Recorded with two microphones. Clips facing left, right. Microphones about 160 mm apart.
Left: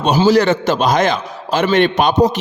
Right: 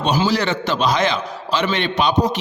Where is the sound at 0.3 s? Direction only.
45° left (ahead or behind).